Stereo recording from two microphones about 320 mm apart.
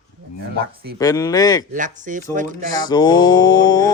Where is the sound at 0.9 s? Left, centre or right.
Centre.